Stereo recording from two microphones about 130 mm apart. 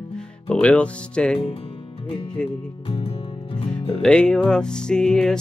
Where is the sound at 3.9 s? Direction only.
5° left (ahead or behind).